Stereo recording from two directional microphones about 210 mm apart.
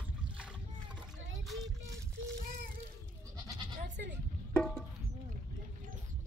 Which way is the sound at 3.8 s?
35° right (ahead or behind).